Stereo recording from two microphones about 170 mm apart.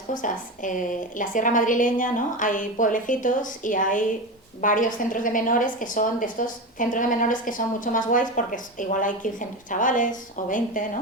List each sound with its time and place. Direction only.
0.1 s a woman's voice: 50° left (ahead or behind)